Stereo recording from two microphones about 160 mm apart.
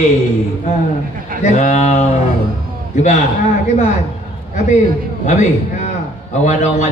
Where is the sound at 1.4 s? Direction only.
45° left (ahead or behind).